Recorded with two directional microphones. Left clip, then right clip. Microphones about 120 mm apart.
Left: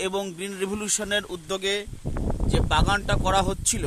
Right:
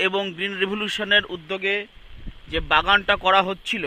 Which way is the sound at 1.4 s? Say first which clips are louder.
Right 2 dB; 35° left (ahead or behind).